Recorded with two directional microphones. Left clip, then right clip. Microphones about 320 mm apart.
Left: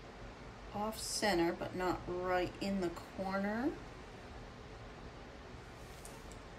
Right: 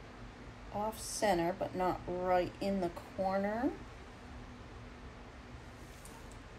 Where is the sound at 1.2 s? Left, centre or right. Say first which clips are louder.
Right 2 dB; centre.